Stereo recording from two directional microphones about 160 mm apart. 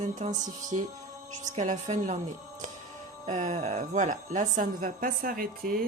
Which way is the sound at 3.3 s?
50° right (ahead or behind).